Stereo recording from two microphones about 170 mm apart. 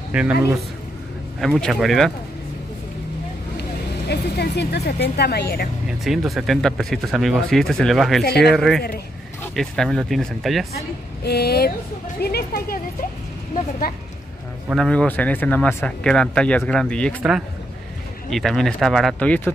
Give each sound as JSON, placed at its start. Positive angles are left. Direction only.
{"t": 0.1, "sound": "speech", "side_deg": -5}
{"t": 4.1, "sound": "speech", "side_deg": 75}
{"t": 5.9, "sound": "speech", "side_deg": 0}
{"t": 11.2, "sound": "speech", "side_deg": 70}
{"t": 14.7, "sound": "speech", "side_deg": 5}
{"t": 18.3, "sound": "speech", "side_deg": 0}